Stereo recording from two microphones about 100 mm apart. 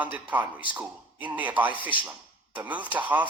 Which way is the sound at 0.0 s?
15° right (ahead or behind).